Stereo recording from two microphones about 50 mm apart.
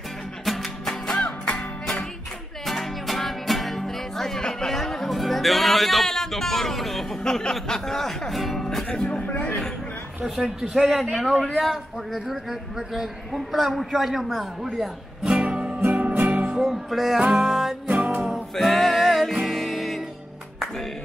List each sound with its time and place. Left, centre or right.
0.5 s music: centre
2.6 s music: centre
7.2 s speech: centre
8.8 s music: centre
9.3 s music: left
10.2 s speech: centre
10.8 s a man's voice: centre
15.2 s music: right
15.9 s music: right
16.6 s music: centre
17.3 s a man's voice: centre
17.8 s music: right
18.5 s music: centre